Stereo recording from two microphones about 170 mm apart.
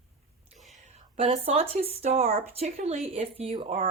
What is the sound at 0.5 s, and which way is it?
Whispering, centre (ahead or behind).